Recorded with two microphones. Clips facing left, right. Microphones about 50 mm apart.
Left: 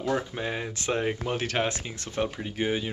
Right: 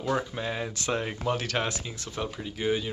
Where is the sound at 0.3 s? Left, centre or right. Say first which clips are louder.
Even; centre.